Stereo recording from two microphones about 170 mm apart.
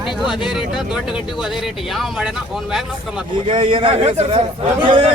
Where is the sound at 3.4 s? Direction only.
40° right (ahead or behind).